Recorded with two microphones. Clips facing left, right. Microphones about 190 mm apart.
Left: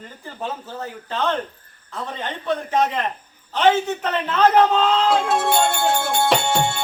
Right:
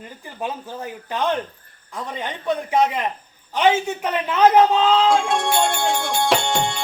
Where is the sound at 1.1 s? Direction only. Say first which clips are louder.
Right 1 dB; 15° right (ahead or behind).